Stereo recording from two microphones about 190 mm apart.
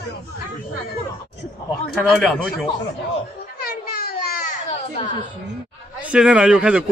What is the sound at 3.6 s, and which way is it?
Baby cry, 55° left (ahead or behind).